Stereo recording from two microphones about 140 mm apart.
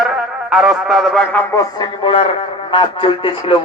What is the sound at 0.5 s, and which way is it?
Speech, 5° right (ahead or behind).